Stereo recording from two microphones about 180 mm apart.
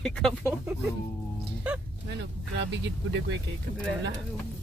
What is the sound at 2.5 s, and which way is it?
Speech, 75° right (ahead or behind).